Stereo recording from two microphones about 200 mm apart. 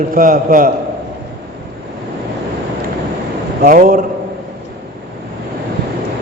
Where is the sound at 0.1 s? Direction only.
45° right (ahead or behind).